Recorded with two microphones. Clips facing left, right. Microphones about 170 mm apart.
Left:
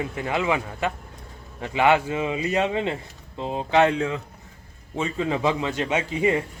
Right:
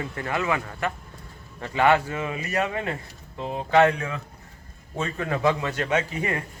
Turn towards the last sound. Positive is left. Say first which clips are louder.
# left 3 dB
turn(degrees=20)  # may be behind; listen again after turning